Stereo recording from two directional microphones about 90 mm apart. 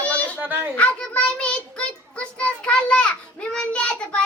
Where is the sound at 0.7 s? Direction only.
15° left (ahead or behind).